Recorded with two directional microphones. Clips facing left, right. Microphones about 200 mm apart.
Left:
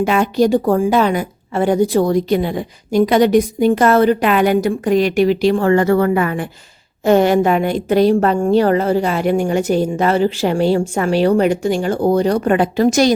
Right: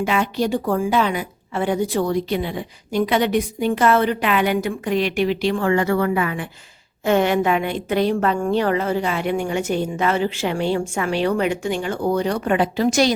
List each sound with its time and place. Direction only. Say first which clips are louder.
0.0 s a woman's voice: left 6 dB; 45° left (ahead or behind)